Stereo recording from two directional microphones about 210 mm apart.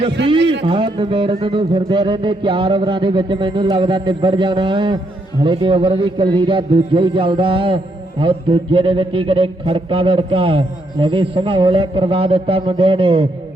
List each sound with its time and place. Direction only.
0.6 s a man's voice: 25° right (ahead or behind)